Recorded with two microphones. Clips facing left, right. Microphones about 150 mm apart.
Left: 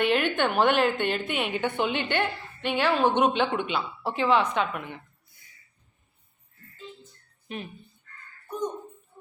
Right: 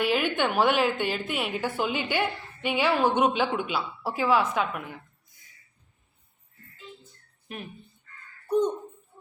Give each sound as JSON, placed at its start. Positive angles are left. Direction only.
{"t": 0.0, "sound": "a woman's voice", "side_deg": -5}
{"t": 7.4, "sound": "music", "side_deg": 0}
{"t": 8.4, "sound": "a sound", "side_deg": -30}